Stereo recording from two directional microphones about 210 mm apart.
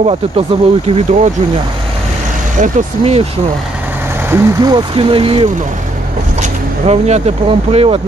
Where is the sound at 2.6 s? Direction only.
30° right (ahead or behind).